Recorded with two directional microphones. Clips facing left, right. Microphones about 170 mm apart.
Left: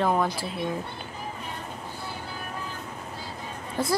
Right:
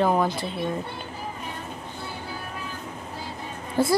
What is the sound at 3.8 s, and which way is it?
Speech, 30° right (ahead or behind).